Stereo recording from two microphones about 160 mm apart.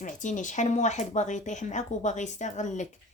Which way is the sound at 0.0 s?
50° left (ahead or behind).